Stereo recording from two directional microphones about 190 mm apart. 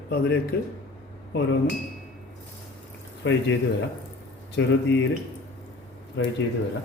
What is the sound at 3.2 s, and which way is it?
Speech, 70° left (ahead or behind).